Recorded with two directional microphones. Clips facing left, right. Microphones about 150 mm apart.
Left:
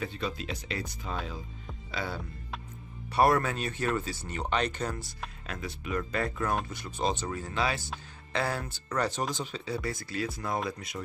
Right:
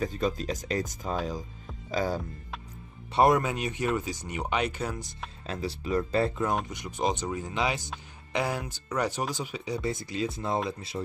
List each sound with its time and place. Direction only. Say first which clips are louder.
0.0 s speech: right 6 dB; 45° right (ahead or behind)
3.1 s speech: right 2 dB; 20° right (ahead or behind)
5.5 s speech: right 5 dB; 30° right (ahead or behind); by 9.8 s 10° right (ahead or behind)
9.8 s speech: right 4 dB; 20° right (ahead or behind)